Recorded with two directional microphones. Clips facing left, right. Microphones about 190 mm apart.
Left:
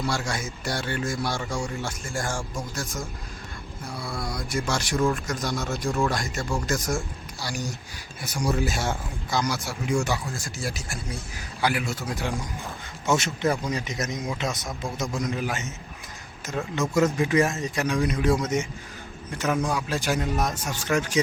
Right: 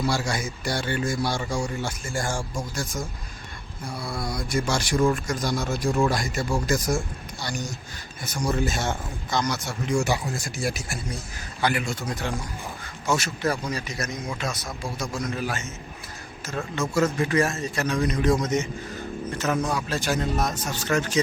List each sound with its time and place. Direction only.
0.0 s speech: centre (ahead or behind)
8.2 s speech: 10° left (ahead or behind)
10.6 s speech: 10° right (ahead or behind)
11.3 s speech: 5° left (ahead or behind)
13.1 s a man's voice: 20° left (ahead or behind)